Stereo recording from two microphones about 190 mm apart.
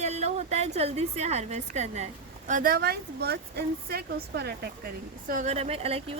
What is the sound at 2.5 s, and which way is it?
A woman's voice, 50° right (ahead or behind).